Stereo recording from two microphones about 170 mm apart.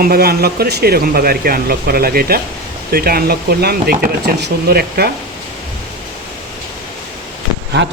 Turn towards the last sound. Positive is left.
turn(degrees=-90)